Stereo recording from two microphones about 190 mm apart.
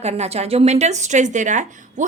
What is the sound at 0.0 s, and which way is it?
A woman's voice, 35° right (ahead or behind).